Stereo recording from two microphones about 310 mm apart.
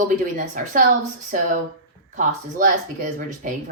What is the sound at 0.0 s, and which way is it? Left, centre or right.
Speech, right.